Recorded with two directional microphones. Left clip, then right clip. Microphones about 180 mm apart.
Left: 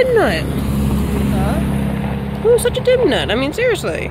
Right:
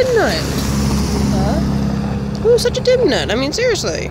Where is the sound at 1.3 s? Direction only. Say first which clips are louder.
Right 1 dB; 40° right (ahead or behind).